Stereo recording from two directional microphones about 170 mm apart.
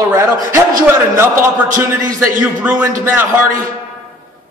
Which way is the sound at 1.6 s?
50° right (ahead or behind).